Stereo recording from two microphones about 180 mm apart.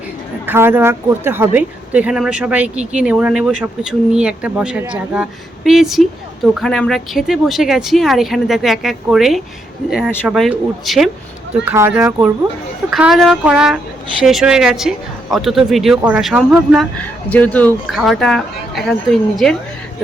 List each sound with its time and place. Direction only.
0.4 s a woman's voice: 10° right (ahead or behind)
11.6 s a woman's voice: 10° right (ahead or behind)